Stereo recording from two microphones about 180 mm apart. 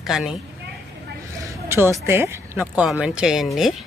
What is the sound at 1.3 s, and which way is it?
Speech, 15° right (ahead or behind).